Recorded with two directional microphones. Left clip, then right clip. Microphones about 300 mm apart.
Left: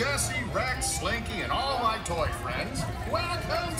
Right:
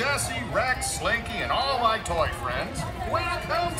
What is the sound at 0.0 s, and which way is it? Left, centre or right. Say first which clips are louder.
Speech: right 2 dB; centre.